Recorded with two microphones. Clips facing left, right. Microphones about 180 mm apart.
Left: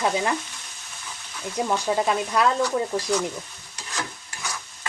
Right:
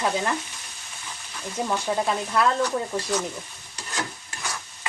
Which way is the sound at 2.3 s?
15° left (ahead or behind).